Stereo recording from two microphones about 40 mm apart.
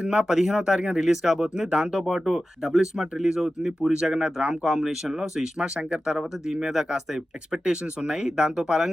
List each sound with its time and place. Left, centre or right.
0.1 s speech: centre
4.6 s speech: centre
6.5 s speech: centre
7.6 s speech: right